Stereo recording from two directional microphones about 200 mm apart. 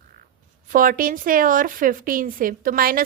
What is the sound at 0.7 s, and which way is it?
A woman's voice, 45° right (ahead or behind).